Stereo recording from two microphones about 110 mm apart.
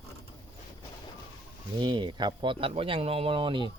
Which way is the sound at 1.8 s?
45° right (ahead or behind).